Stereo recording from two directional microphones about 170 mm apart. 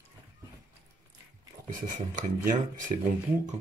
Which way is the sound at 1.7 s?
55° right (ahead or behind).